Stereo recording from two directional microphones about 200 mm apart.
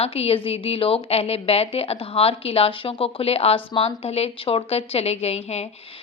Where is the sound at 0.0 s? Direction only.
30° left (ahead or behind).